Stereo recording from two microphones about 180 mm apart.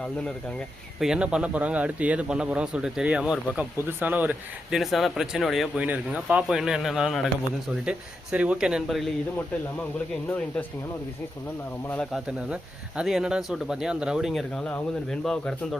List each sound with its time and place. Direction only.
0.9 s a man's voice: 5° right (ahead or behind)
11.9 s a man's voice: 5° left (ahead or behind)